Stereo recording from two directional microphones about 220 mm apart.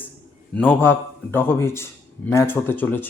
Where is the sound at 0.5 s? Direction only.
10° left (ahead or behind).